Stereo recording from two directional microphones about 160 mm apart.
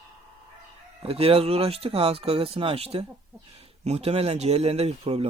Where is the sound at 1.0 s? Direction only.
40° right (ahead or behind).